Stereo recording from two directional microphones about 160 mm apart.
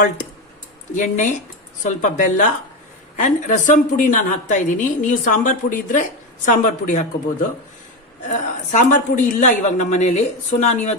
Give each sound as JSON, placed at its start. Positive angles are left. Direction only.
{"t": 0.9, "sound": "a woman's voice", "side_deg": 50}
{"t": 8.3, "sound": "a woman's voice", "side_deg": 50}